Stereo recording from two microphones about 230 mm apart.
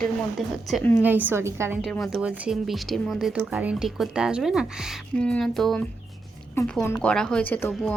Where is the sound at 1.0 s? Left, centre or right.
Centre.